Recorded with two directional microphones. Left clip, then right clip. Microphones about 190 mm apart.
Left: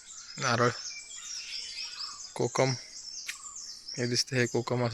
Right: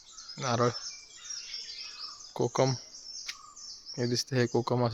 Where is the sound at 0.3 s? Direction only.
10° right (ahead or behind).